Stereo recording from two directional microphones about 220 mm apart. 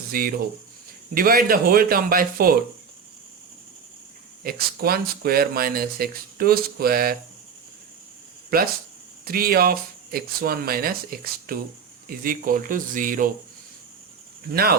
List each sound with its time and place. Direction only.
0.1 s speech: 40° right (ahead or behind)
4.4 s speech: 45° right (ahead or behind)
8.4 s speech: 45° right (ahead or behind)
14.5 s speech: 45° right (ahead or behind)